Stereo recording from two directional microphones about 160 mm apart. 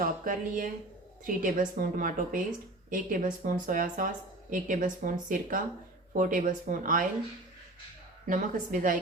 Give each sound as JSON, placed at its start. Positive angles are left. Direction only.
{"t": 0.0, "sound": "speech", "side_deg": -60}
{"t": 8.3, "sound": "speech", "side_deg": -55}